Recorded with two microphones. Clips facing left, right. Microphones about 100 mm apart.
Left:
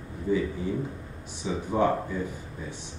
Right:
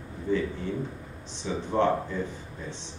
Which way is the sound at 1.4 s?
10° left (ahead or behind).